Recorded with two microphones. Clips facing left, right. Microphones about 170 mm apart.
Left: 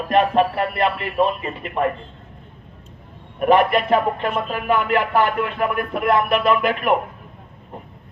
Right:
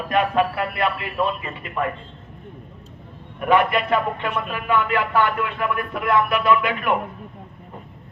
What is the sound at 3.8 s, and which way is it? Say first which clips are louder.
Speech: left 3 dB; 35° left (ahead or behind).